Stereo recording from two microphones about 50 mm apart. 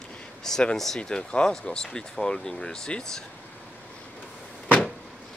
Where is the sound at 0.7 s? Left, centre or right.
Centre.